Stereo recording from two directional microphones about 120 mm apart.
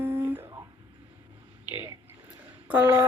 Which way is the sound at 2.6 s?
15° right (ahead or behind).